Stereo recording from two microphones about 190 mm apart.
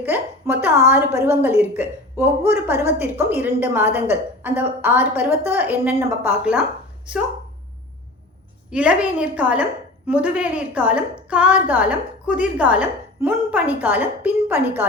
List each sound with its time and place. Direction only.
0.0 s a woman's voice: 10° right (ahead or behind)
8.7 s a woman's voice: 5° right (ahead or behind)